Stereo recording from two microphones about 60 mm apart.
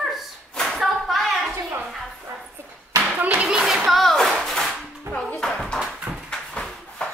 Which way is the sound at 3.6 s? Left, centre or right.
Centre.